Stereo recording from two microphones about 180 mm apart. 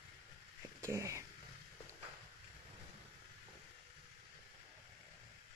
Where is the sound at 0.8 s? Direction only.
15° right (ahead or behind).